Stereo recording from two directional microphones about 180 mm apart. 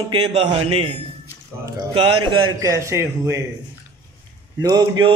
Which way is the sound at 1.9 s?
30° right (ahead or behind).